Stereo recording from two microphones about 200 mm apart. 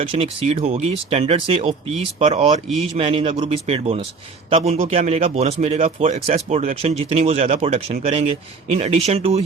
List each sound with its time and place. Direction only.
0.1 s a man's voice: 30° right (ahead or behind)